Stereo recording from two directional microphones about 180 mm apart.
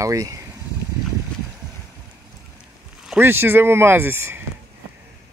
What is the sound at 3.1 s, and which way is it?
Speech, 10° right (ahead or behind).